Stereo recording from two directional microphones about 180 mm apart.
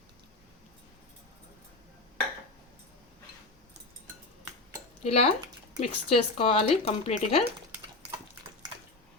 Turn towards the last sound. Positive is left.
turn(degrees=35)  # may be behind; listen again after turning